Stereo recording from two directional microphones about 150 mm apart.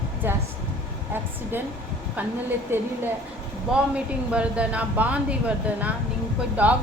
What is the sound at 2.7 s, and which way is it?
Speech, 15° right (ahead or behind).